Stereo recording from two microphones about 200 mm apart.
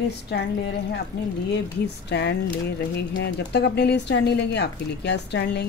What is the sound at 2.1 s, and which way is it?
Speech, 60° left (ahead or behind).